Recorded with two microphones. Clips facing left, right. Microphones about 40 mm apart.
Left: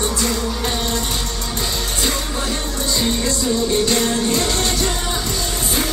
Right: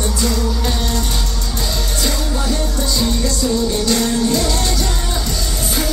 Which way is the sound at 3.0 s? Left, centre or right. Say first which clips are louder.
Right 1 dB; left.